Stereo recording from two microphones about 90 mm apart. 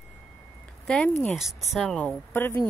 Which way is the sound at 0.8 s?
15° left (ahead or behind).